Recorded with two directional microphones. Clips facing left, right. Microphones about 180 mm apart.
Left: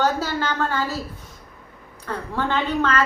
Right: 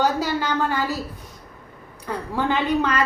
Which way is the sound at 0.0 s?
15° right (ahead or behind).